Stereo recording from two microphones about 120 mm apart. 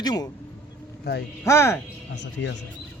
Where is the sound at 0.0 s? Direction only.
35° left (ahead or behind).